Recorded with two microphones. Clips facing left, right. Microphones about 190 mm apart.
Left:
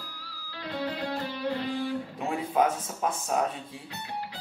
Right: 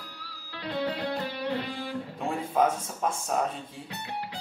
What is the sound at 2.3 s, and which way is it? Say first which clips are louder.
Speech: even; 5° left (ahead or behind).